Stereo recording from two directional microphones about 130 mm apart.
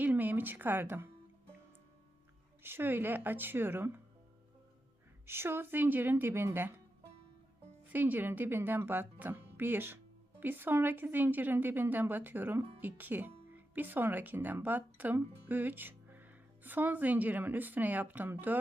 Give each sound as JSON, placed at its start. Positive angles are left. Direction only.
{"t": 0.0, "sound": "music", "side_deg": -15}
{"t": 2.6, "sound": "speech", "side_deg": -15}
{"t": 5.2, "sound": "speech", "side_deg": -20}
{"t": 7.9, "sound": "speech", "side_deg": -15}